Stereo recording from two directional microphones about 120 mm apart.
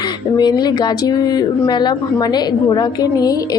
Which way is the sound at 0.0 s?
35° left (ahead or behind).